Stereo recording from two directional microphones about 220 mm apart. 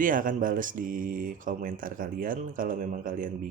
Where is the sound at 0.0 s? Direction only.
40° right (ahead or behind).